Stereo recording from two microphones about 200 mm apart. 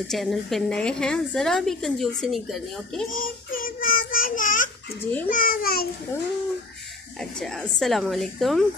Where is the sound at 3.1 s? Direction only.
45° left (ahead or behind).